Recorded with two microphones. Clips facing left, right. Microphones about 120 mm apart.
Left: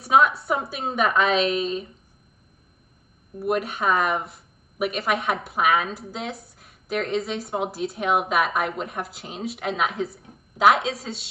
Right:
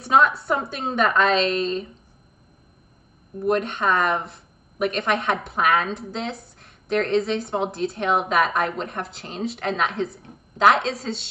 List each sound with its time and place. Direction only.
0.0 s speech: centre (ahead or behind)
3.3 s speech: 5° left (ahead or behind)